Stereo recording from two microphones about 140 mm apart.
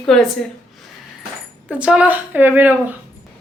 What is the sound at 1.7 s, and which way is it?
A woman's voice, 10° right (ahead or behind).